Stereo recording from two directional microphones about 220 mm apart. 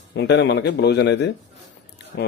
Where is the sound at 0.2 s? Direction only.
50° left (ahead or behind).